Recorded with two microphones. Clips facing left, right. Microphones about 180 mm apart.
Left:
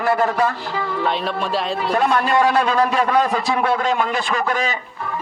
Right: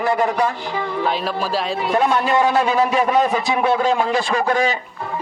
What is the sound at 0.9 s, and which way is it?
Speech, centre (ahead or behind).